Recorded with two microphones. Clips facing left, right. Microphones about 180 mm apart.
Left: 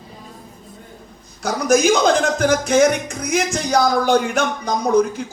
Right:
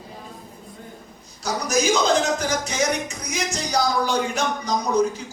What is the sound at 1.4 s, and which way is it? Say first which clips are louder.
Speech: left 7 dB; 55° left (ahead or behind).